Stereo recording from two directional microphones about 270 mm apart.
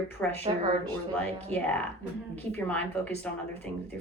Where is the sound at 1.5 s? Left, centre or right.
Centre.